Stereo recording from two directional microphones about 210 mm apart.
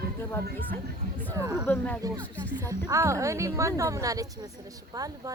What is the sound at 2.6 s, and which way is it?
A woman's voice, 15° right (ahead or behind).